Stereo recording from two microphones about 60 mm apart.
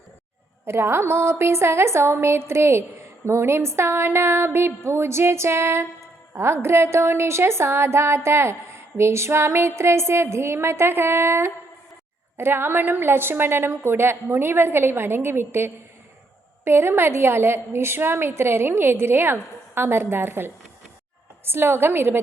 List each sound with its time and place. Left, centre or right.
0.6 s a woman's voice: right